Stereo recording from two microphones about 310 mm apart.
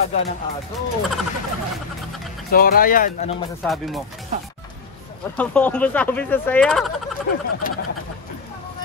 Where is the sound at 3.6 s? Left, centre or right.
Centre.